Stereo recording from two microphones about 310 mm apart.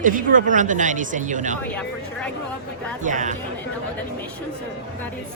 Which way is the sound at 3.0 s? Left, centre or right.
Right.